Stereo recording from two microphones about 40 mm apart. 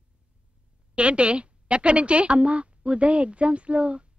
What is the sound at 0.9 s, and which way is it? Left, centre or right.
A woman's voice, right.